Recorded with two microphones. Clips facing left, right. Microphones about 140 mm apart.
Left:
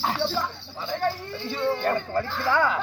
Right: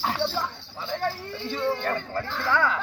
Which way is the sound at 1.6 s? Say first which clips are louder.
Left 3 dB; 15° left (ahead or behind).